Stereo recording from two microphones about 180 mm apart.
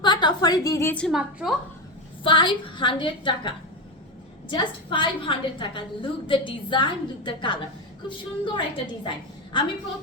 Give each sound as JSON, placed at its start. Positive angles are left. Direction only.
{"t": 0.0, "sound": "a sound", "side_deg": 25}
{"t": 1.0, "sound": "a woman's voice", "side_deg": 0}
{"t": 2.2, "sound": "a woman's voice", "side_deg": 25}